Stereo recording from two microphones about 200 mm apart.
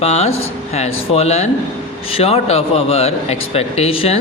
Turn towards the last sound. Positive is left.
turn(degrees=30)  # may be behind; listen again after turning